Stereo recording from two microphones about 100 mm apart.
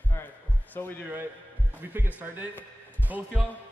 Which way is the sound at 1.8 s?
20° right (ahead or behind).